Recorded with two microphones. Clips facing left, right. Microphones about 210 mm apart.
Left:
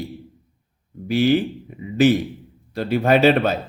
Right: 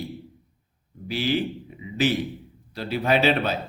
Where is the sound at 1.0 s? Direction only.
50° left (ahead or behind).